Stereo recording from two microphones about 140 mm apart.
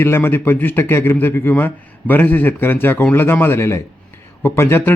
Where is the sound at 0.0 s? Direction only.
15° left (ahead or behind).